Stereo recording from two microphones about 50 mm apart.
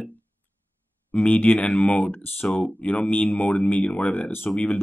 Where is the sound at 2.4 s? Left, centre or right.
Centre.